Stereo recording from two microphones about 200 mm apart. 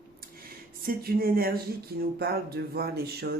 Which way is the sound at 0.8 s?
50° right (ahead or behind).